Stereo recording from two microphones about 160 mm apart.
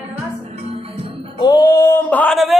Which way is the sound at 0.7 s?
35° right (ahead or behind).